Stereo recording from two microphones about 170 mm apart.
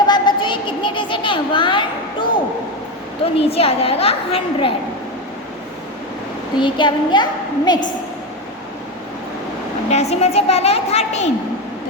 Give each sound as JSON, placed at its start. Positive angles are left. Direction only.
{"t": 0.1, "sound": "a sound", "side_deg": 25}
{"t": 3.3, "sound": "a woman's voice", "side_deg": 35}
{"t": 6.6, "sound": "a woman's voice", "side_deg": 30}
{"t": 9.9, "sound": "a woman's voice", "side_deg": 40}